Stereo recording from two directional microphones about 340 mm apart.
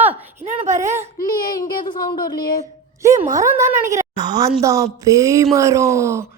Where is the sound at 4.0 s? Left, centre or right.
Centre.